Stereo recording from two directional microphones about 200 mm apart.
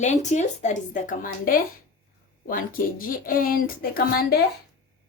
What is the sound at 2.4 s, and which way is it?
Speech, 45° left (ahead or behind).